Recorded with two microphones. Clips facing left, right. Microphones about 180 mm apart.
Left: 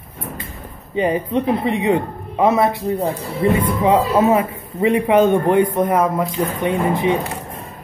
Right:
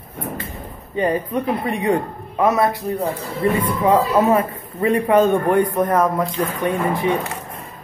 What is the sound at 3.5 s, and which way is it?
A man's voice, 10° left (ahead or behind).